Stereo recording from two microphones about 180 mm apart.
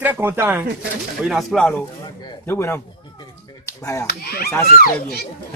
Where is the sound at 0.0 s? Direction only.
10° right (ahead or behind).